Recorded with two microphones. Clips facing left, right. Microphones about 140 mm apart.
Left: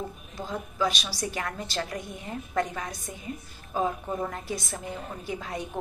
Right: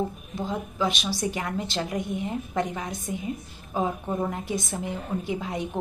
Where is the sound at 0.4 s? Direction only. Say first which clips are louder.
Right 2 dB; 20° right (ahead or behind).